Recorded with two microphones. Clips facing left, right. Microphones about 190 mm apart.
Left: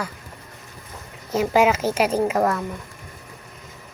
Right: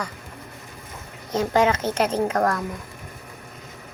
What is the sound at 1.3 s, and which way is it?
A woman's voice, 10° left (ahead or behind).